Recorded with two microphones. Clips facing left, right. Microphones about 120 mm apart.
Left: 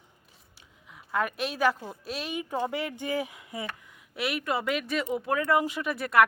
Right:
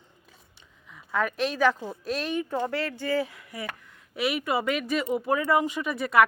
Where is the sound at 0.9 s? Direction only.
5° left (ahead or behind); by 3.7 s 20° left (ahead or behind).